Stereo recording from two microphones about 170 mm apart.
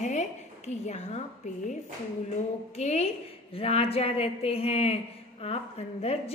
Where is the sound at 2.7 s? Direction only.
40° left (ahead or behind).